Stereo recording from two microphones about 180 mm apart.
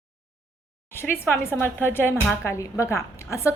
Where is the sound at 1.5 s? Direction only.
10° left (ahead or behind).